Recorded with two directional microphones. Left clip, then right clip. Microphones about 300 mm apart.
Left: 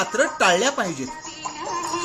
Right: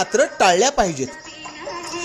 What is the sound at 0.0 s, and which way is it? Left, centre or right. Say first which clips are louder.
Speech: right 3 dB; centre.